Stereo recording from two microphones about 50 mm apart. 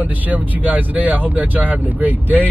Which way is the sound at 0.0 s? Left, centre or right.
Right.